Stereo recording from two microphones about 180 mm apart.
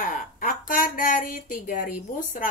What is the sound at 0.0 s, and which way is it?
Speech, 50° left (ahead or behind).